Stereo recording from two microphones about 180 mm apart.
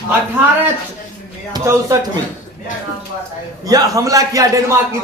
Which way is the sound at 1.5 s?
20° right (ahead or behind).